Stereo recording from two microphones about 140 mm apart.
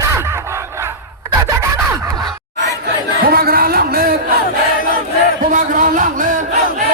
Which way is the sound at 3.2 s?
90° right.